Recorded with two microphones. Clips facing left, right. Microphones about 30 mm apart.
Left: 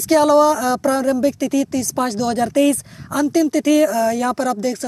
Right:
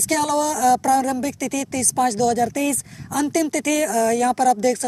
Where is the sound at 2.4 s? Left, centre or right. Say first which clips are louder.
Left 5 dB; left.